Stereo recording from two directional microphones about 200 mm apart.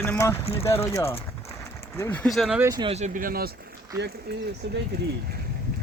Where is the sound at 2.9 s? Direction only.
40° right (ahead or behind).